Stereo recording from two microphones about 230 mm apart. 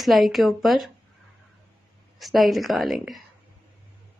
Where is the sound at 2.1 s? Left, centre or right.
Centre.